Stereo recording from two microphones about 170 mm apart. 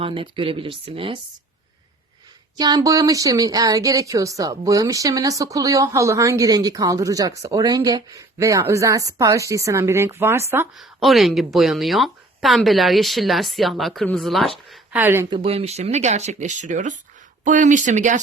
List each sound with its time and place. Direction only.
0.0 s speech: 30° right (ahead or behind)
2.6 s speech: 20° right (ahead or behind)
10.8 s speech: centre (ahead or behind)
14.7 s speech: 10° right (ahead or behind)
15.3 s speech: 35° right (ahead or behind)